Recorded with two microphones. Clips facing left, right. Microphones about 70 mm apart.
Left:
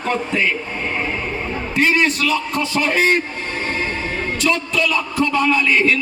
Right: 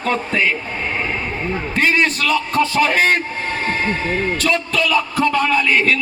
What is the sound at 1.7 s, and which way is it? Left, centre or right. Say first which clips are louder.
A man's voice: left 1 dB; right.